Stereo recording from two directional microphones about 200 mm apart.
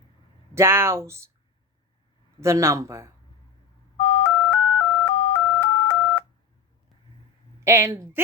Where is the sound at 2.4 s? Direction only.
15° right (ahead or behind).